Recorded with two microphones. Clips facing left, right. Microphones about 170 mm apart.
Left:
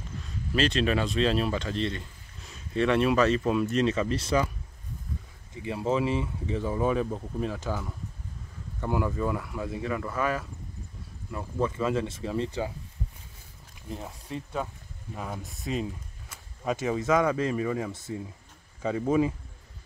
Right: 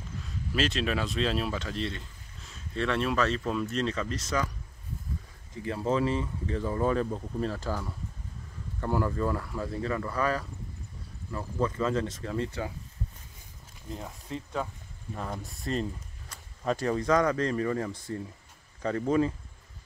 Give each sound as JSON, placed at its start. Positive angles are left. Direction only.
{"t": 0.6, "sound": "speech", "side_deg": 0}
{"t": 2.7, "sound": "speech", "side_deg": 10}
{"t": 4.2, "sound": "speech", "side_deg": 30}
{"t": 5.8, "sound": "speech", "side_deg": 10}
{"t": 8.8, "sound": "speech", "side_deg": 10}
{"t": 13.8, "sound": "speech", "side_deg": 15}